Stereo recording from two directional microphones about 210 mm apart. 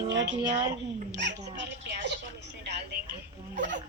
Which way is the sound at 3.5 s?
60° right (ahead or behind).